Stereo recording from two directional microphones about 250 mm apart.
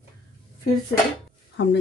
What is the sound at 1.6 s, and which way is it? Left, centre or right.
Speech, left.